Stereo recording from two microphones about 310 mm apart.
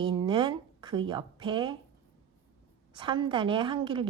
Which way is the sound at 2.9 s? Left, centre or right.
Centre.